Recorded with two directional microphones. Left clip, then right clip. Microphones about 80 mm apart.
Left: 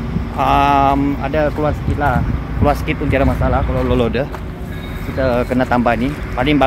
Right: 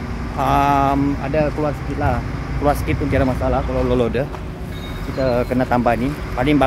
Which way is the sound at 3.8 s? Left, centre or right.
Right.